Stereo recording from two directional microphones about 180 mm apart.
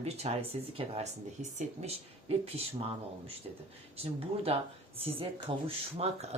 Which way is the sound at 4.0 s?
35° right (ahead or behind).